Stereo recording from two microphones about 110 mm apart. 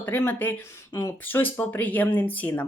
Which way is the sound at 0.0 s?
20° left (ahead or behind).